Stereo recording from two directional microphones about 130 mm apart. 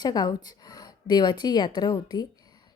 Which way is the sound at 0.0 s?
30° left (ahead or behind).